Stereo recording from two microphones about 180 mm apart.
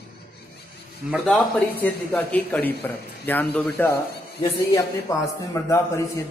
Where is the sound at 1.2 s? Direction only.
10° left (ahead or behind).